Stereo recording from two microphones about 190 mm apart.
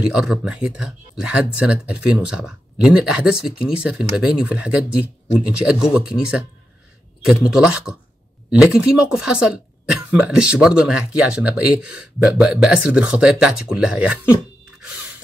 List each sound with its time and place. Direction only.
0.1 s speech: 5° right (ahead or behind)